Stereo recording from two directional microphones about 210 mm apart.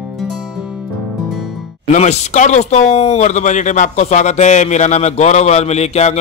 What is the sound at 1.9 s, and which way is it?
Speech, 30° left (ahead or behind).